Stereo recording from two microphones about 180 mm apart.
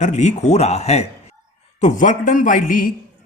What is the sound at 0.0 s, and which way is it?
Speech, 40° left (ahead or behind).